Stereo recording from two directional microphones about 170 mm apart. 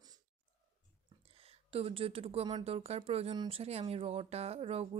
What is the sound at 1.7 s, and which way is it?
Speech, 35° right (ahead or behind).